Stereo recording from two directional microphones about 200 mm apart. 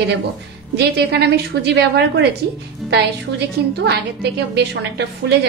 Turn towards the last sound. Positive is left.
turn(degrees=-55)  # may be behind; listen again after turning